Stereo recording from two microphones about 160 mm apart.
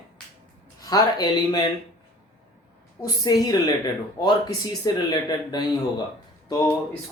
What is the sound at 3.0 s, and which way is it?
Speech, 25° left (ahead or behind).